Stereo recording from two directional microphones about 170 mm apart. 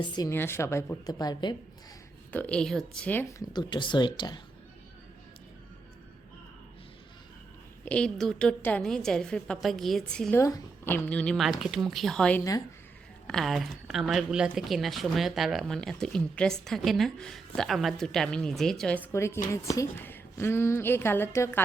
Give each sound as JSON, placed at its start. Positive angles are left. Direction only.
{"t": 0.0, "sound": "a woman's voice", "side_deg": 25}
{"t": 2.3, "sound": "a woman's voice", "side_deg": 10}
{"t": 7.9, "sound": "a woman's voice", "side_deg": 5}
{"t": 10.3, "sound": "a woman's voice", "side_deg": 15}